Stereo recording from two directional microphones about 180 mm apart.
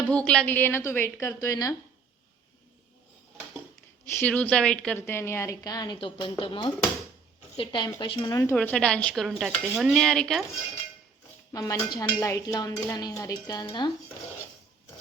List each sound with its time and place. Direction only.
0.1 s a woman's voice: 5° left (ahead or behind)
4.2 s a woman's voice: 10° left (ahead or behind)
8.5 s speech: 5° left (ahead or behind)
11.5 s speech: 20° left (ahead or behind)